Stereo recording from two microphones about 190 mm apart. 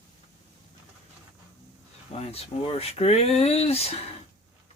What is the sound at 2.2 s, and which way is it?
Speech, 30° left (ahead or behind).